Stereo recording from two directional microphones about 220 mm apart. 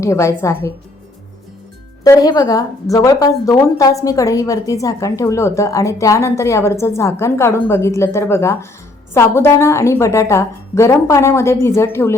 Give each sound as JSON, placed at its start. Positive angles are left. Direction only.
{"t": 0.0, "sound": "a woman's voice", "side_deg": 15}
{"t": 2.0, "sound": "a woman's voice", "side_deg": 15}